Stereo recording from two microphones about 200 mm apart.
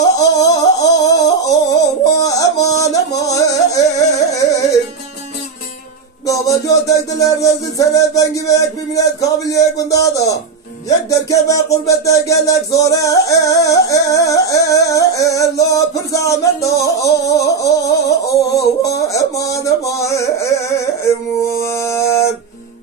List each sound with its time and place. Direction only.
0.0 s music: 20° left (ahead or behind)
6.2 s music: 15° left (ahead or behind)
21.5 s a sound: 15° left (ahead or behind)